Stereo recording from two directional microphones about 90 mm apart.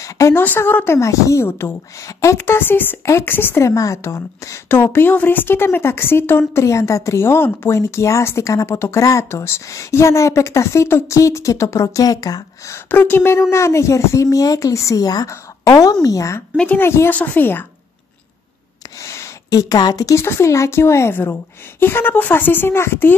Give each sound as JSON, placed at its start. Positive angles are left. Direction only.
{"t": 0.0, "sound": "speech", "side_deg": 35}
{"t": 0.4, "sound": "a woman's voice", "side_deg": 20}
{"t": 12.9, "sound": "a woman's voice", "side_deg": 20}
{"t": 16.5, "sound": "a woman's voice", "side_deg": 20}
{"t": 19.0, "sound": "a sound", "side_deg": 35}
{"t": 20.2, "sound": "a woman's voice", "side_deg": 30}